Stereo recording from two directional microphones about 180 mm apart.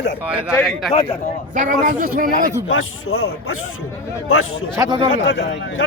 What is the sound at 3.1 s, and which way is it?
Speech, 70° left (ahead or behind).